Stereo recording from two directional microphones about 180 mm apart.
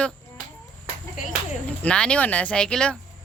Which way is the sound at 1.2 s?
50° left (ahead or behind).